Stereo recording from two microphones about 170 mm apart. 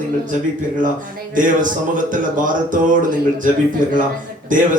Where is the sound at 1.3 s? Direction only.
50° right (ahead or behind).